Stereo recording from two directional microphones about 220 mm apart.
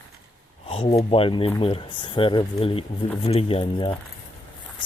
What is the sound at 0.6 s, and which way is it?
Speech, 25° left (ahead or behind).